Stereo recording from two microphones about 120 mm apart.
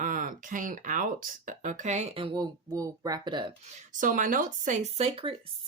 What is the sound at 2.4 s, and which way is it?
Speech, 30° right (ahead or behind).